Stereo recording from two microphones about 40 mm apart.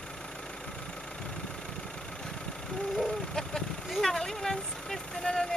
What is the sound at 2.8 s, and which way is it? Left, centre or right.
Chicken, centre.